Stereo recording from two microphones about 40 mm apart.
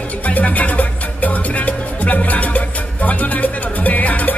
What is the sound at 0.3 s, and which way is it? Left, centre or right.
Music, left.